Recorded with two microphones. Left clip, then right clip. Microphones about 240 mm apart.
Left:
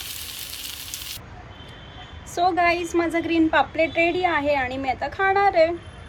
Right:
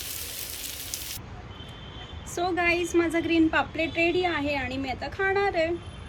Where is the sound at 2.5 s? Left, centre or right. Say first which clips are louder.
Left 3 dB; centre.